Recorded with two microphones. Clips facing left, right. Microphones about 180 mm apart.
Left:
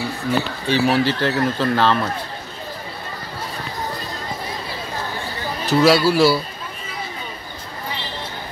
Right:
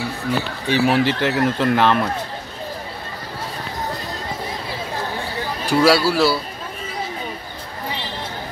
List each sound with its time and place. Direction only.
0.7 s speech: 15° right (ahead or behind)
5.7 s speech: 10° right (ahead or behind)